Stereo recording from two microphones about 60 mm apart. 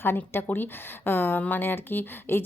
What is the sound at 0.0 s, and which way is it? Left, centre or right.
Speech, left.